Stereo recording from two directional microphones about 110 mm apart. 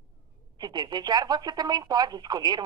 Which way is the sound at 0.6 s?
40° right (ahead or behind).